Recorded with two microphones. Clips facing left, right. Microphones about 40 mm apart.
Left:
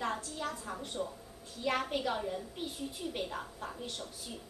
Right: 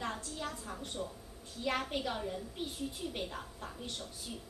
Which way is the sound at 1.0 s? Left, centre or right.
Centre.